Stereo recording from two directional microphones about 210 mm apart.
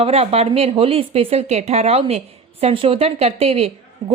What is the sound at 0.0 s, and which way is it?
A woman's voice, 30° right (ahead or behind).